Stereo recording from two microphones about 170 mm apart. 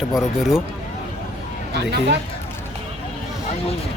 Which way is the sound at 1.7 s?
75° right (ahead or behind).